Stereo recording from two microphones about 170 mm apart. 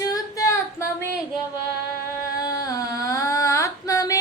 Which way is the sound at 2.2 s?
20° left (ahead or behind).